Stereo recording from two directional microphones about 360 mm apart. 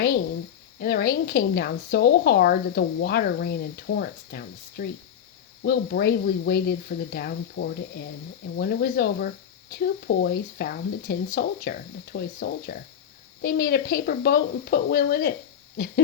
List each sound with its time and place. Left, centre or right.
0.8 s speech: left